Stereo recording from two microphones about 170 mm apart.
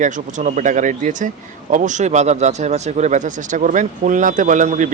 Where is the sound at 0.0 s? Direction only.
45° right (ahead or behind).